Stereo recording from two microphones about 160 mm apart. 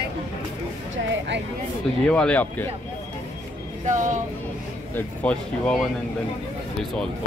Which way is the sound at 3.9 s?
50° right (ahead or behind).